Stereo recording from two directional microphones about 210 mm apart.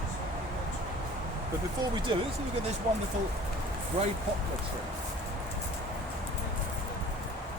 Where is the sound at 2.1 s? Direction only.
20° right (ahead or behind).